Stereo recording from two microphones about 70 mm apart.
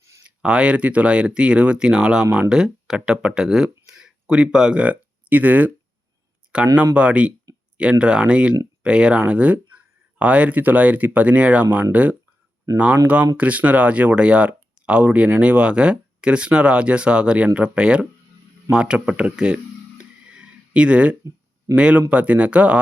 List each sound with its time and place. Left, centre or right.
0.4 s speech: centre
6.4 s a sound: centre
6.9 s speech: centre
13.3 s speech: right
20.2 s a sound: centre
21.8 s speech: centre